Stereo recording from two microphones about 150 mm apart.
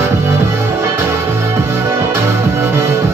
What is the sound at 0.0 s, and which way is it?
Music, 15° right (ahead or behind).